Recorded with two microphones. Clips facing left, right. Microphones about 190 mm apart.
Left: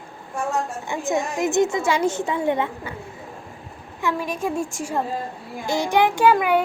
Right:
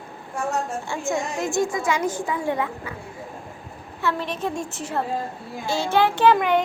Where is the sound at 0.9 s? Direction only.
20° left (ahead or behind).